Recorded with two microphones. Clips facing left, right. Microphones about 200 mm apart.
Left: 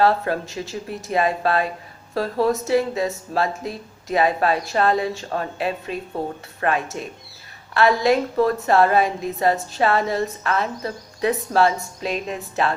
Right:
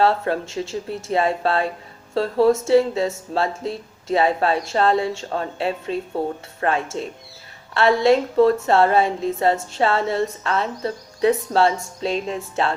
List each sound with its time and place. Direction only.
0.0 s a woman's voice: 25° right (ahead or behind)